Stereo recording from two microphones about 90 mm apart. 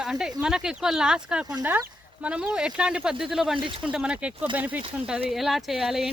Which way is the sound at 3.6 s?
65° right (ahead or behind).